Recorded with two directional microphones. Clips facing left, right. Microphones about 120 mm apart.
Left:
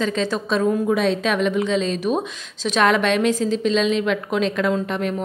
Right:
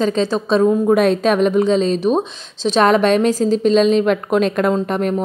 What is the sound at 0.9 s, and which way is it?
A woman's voice, 50° right (ahead or behind).